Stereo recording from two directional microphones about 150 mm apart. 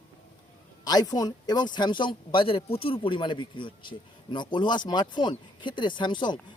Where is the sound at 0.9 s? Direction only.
25° left (ahead or behind).